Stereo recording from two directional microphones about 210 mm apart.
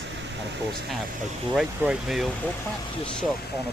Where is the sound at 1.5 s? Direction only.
5° right (ahead or behind).